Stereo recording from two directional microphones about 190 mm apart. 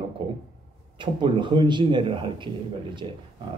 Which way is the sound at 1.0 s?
25° right (ahead or behind).